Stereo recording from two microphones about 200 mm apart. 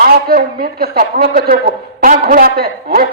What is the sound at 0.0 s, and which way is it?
A woman's voice, 45° right (ahead or behind).